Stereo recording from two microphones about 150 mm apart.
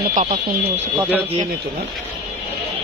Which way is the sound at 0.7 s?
15° right (ahead or behind).